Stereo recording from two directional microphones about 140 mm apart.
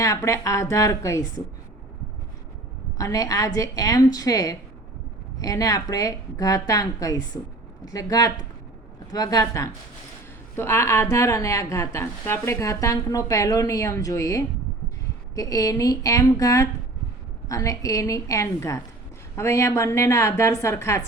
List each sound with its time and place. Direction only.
0.0 s speech: 20° left (ahead or behind)
3.0 s speech: 25° left (ahead or behind)